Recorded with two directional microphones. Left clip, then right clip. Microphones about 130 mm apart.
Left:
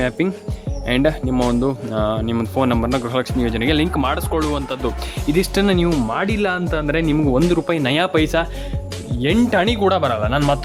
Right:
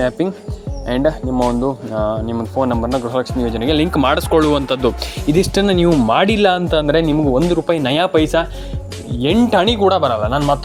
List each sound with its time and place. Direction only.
0.9 s speech: 15° left (ahead or behind)
1.4 s speech: centre (ahead or behind)
1.6 s speech: 20° left (ahead or behind)
3.1 s speech: 10° left (ahead or behind)
3.9 s speech: 35° right (ahead or behind)
5.2 s speech: 10° right (ahead or behind)
6.8 s speech: centre (ahead or behind)